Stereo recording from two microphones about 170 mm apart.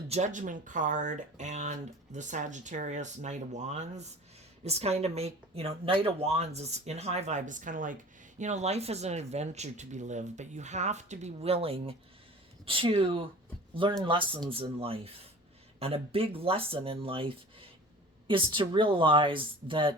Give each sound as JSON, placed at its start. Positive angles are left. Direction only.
{"t": 0.1, "sound": "speech", "side_deg": -45}